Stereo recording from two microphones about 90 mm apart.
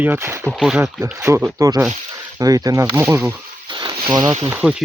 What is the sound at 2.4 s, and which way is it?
Speech, 40° right (ahead or behind).